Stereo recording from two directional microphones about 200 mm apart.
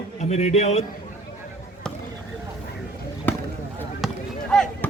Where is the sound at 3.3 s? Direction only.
10° left (ahead or behind).